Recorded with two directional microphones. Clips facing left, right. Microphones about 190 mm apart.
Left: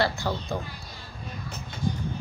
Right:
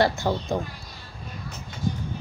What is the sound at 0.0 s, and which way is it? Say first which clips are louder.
Speech: right 4 dB; 15° right (ahead or behind).